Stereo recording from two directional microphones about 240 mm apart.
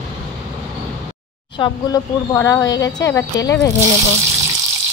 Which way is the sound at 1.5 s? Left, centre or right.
Centre.